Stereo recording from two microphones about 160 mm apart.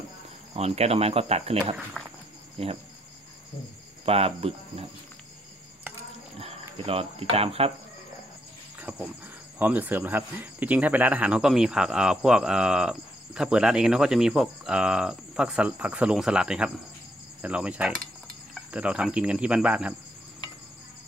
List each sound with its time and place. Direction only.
0.6 s speech: 40° right (ahead or behind)
2.0 s speech: 10° left (ahead or behind)
2.6 s speech: 40° right (ahead or behind)
4.0 s speech: 35° right (ahead or behind)
6.4 s speech: 35° right (ahead or behind)
8.8 s cricket: 5° right (ahead or behind)
9.6 s speech: 10° right (ahead or behind)
17.4 s cricket: 5° right (ahead or behind)
18.5 s speech: 5° right (ahead or behind)